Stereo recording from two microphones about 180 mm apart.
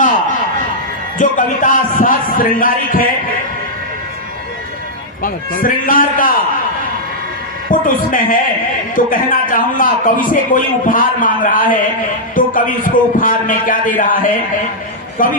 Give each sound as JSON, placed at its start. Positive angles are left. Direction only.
{"t": 1.2, "sound": "speech", "side_deg": 45}
{"t": 5.2, "sound": "speech", "side_deg": 50}
{"t": 7.7, "sound": "speech", "side_deg": 50}
{"t": 15.2, "sound": "speech", "side_deg": 50}